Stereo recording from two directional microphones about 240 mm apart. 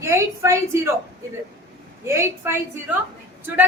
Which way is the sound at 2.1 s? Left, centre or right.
Centre.